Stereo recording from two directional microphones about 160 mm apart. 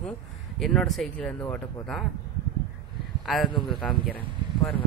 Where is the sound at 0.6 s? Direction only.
Centre (ahead or behind).